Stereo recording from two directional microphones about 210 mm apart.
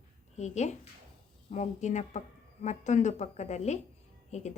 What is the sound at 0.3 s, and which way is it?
Speech, 35° left (ahead or behind).